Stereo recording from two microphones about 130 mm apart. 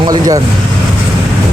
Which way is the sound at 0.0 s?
35° right (ahead or behind).